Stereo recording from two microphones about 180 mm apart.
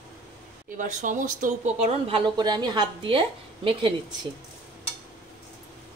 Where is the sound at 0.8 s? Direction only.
45° right (ahead or behind); by 3.9 s 30° right (ahead or behind).